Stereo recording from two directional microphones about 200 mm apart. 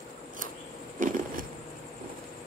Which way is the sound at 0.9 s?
40° right (ahead or behind).